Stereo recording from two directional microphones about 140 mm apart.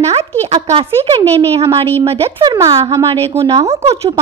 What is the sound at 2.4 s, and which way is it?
Speech, 25° right (ahead or behind).